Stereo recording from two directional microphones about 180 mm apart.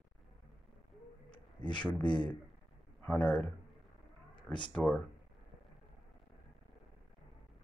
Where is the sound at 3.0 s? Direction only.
10° left (ahead or behind).